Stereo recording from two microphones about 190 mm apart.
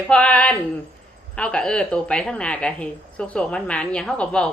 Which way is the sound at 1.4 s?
5° left (ahead or behind).